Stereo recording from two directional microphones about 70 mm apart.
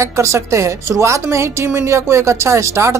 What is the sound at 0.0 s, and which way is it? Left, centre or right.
A woman's voice, right.